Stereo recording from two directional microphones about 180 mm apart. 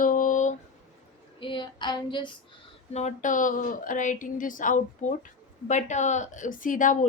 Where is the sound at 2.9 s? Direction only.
40° left (ahead or behind).